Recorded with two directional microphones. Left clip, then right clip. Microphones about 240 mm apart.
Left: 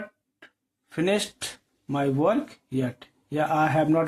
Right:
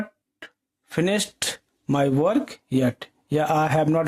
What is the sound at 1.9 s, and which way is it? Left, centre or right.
Speech, right.